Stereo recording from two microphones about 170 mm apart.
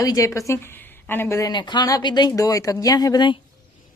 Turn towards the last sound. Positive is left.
turn(degrees=25)  # may be behind; listen again after turning